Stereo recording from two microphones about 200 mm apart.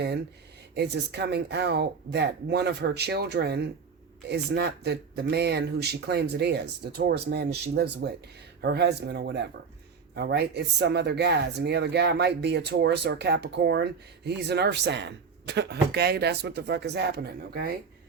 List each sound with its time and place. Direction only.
0.7 s speech: 55° right (ahead or behind)